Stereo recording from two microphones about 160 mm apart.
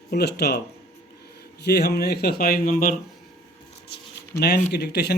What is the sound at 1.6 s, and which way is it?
Speech, 85° left.